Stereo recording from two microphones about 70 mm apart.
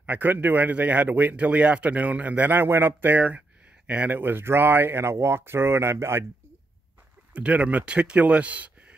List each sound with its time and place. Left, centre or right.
0.0 s speech: right
7.3 s speech: centre